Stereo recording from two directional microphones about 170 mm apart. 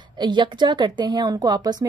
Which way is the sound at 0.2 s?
25° right (ahead or behind).